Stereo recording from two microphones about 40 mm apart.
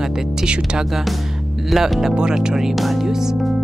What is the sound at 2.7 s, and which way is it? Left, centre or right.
Speech, centre.